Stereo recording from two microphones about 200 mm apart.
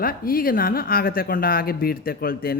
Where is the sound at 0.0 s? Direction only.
45° left (ahead or behind).